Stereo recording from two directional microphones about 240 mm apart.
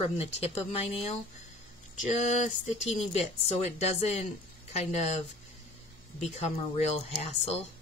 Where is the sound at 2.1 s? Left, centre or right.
Left.